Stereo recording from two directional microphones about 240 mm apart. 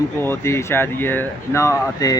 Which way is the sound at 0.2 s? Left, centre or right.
Centre.